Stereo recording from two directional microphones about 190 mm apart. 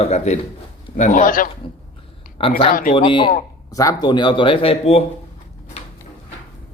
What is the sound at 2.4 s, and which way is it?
Speech, 30° left (ahead or behind).